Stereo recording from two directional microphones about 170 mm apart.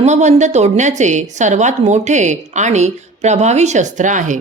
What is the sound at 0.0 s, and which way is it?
A woman's voice, 45° right (ahead or behind).